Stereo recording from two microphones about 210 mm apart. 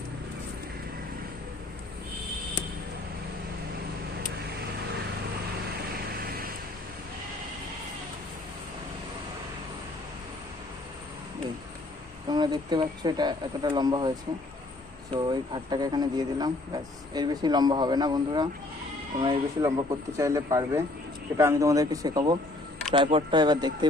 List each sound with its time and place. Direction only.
6.1 s vehicle: 45° right (ahead or behind)
12.3 s speech: 20° right (ahead or behind)
15.1 s speech: 20° right (ahead or behind)